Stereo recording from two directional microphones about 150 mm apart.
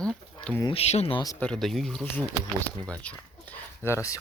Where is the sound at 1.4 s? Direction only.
5° left (ahead or behind).